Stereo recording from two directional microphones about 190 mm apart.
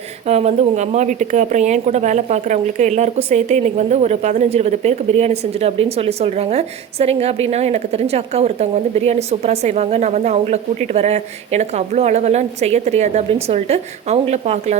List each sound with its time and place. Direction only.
0.3 s a woman's voice: 35° right (ahead or behind)